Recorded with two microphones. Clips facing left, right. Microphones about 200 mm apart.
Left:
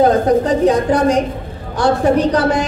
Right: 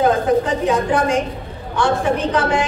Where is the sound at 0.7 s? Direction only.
40° left (ahead or behind).